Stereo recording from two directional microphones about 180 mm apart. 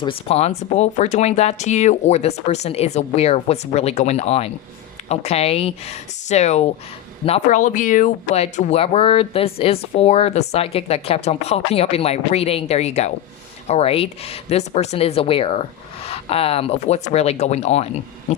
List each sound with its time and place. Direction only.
0.0 s speech: 30° left (ahead or behind)